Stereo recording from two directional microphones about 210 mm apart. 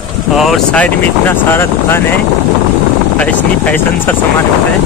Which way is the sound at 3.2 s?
5° left (ahead or behind).